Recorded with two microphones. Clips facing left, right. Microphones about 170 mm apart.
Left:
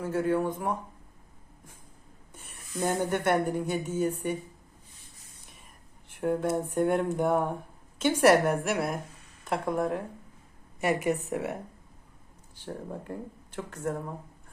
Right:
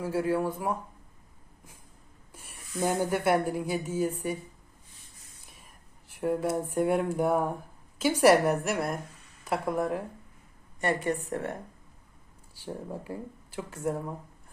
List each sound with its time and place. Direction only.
0.0 s speech: 5° right (ahead or behind)
2.3 s speech: 5° right (ahead or behind)
5.5 s whispering: centre (ahead or behind)
6.7 s a woman's voice: 5° right (ahead or behind)
10.8 s a woman's voice: 10° left (ahead or behind)
12.5 s speech: 5° right (ahead or behind)